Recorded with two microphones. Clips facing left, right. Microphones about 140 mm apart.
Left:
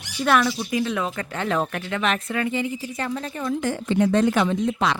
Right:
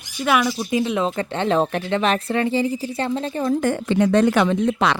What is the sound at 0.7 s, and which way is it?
Speech, 25° right (ahead or behind).